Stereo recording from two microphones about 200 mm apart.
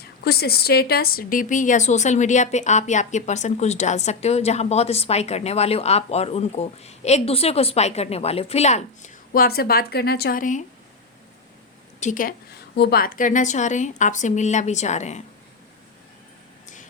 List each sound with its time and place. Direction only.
0.3 s a woman's voice: 50° left (ahead or behind)
11.9 s a woman's voice: 40° left (ahead or behind)
12.7 s a woman's voice: 50° left (ahead or behind); by 15.2 s 35° left (ahead or behind)